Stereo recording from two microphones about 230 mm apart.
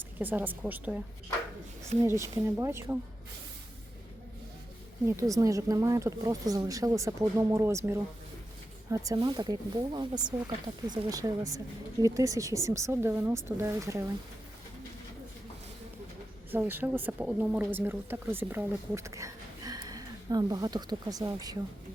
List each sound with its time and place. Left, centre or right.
0.2 s speech: centre
2.0 s speech: centre
5.3 s speech: centre
16.5 s speech: centre